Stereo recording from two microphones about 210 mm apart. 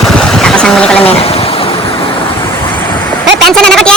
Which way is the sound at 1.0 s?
30° left (ahead or behind).